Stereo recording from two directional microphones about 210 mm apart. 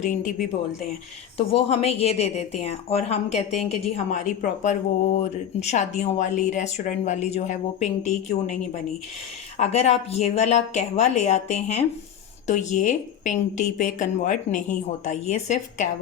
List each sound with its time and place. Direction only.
0.0 s a woman's voice: 35° left (ahead or behind)
1.4 s a woman's voice: 30° left (ahead or behind)
9.6 s a woman's voice: 30° left (ahead or behind)